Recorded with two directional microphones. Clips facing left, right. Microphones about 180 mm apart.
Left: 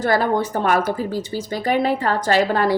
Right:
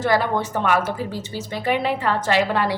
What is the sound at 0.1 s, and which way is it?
A woman's voice, 40° left (ahead or behind).